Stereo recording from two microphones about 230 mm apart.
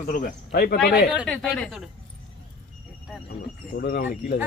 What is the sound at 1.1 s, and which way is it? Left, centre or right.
Speech, centre.